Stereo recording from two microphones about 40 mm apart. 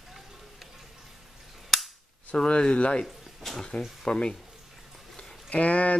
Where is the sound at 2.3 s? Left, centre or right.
Left.